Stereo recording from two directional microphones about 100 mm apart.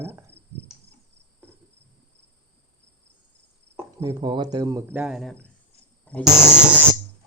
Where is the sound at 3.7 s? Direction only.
30° right (ahead or behind).